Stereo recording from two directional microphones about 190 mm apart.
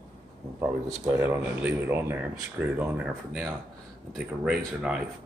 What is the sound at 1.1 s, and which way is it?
Speech, 10° right (ahead or behind).